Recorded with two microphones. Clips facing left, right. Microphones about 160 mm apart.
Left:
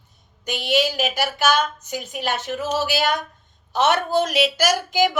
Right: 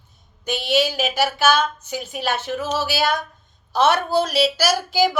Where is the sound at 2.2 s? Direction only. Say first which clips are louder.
Right 1 dB; 15° left (ahead or behind).